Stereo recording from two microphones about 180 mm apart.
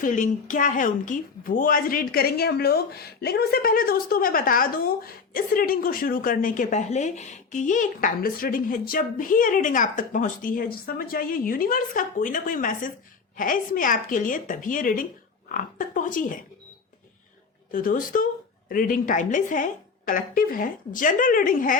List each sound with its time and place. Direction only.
0.0 s a woman's voice: 45° left (ahead or behind)
17.7 s a woman's voice: 50° left (ahead or behind)